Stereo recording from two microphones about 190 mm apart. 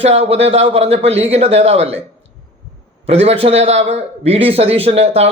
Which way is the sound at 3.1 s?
30° right (ahead or behind).